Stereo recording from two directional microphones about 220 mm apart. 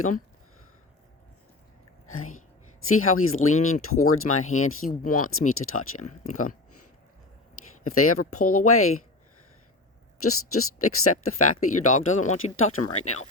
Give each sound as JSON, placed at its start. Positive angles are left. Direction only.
{"t": 2.0, "sound": "speech", "side_deg": 75}
{"t": 4.9, "sound": "speech", "side_deg": 40}
{"t": 5.3, "sound": "speech", "side_deg": 75}
{"t": 7.9, "sound": "speech", "side_deg": 80}
{"t": 10.2, "sound": "speech", "side_deg": 80}
{"t": 13.0, "sound": "speech", "side_deg": 30}